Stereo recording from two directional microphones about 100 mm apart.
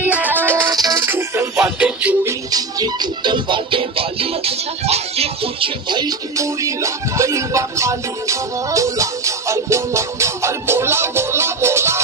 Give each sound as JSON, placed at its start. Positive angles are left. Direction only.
{"t": 0.0, "sound": "music", "side_deg": -15}
{"t": 0.7, "sound": "music", "side_deg": -40}
{"t": 1.0, "sound": "music", "side_deg": -25}
{"t": 1.8, "sound": "music", "side_deg": -10}
{"t": 2.5, "sound": "music", "side_deg": -40}
{"t": 6.3, "sound": "music", "side_deg": -30}